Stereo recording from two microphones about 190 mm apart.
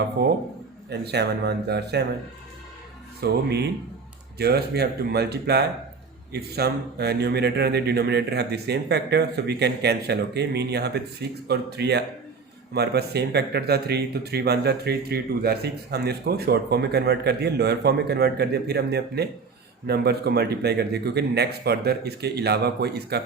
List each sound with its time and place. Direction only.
0.9 s speech: 60° right (ahead or behind)
3.2 s speech: 60° right (ahead or behind)